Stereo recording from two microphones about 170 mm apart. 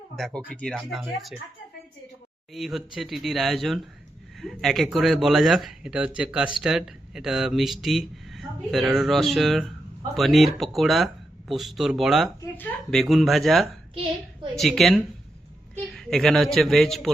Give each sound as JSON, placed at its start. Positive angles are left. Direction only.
{"t": 0.2, "sound": "speech", "side_deg": 5}
{"t": 2.5, "sound": "speech", "side_deg": 0}
{"t": 12.4, "sound": "speech", "side_deg": 10}